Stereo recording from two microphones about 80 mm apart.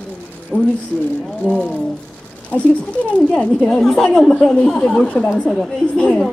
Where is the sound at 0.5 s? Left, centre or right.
Centre.